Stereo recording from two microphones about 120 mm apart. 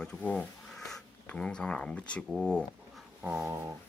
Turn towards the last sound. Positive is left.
turn(degrees=-15)  # may be behind; listen again after turning